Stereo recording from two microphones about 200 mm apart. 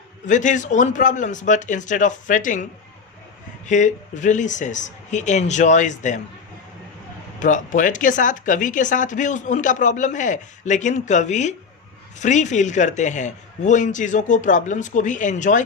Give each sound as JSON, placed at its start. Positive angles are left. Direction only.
{"t": 0.3, "sound": "speech", "side_deg": 40}
{"t": 3.7, "sound": "speech", "side_deg": 40}
{"t": 7.3, "sound": "speech", "side_deg": 40}